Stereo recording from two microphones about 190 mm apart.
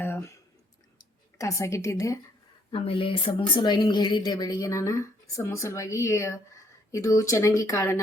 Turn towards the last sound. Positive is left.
turn(degrees=15)  # may be behind; listen again after turning